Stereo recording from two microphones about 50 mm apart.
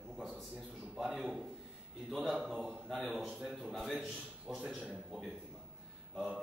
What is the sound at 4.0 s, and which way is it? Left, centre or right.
Speech, centre.